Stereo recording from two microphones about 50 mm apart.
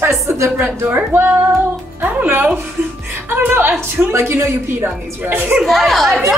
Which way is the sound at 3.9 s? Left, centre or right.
Right.